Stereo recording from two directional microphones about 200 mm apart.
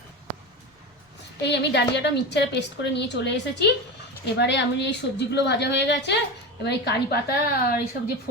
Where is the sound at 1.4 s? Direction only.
60° left (ahead or behind).